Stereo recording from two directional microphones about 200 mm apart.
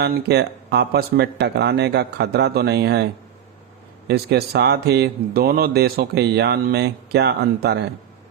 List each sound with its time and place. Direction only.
0.0 s speech: 55° right (ahead or behind)
4.1 s speech: 55° right (ahead or behind)